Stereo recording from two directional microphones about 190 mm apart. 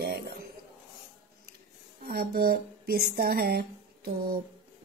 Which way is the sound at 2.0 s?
50° right (ahead or behind).